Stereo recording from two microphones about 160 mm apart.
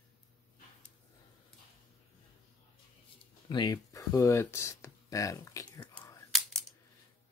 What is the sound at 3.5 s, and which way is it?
Speech, 25° left (ahead or behind).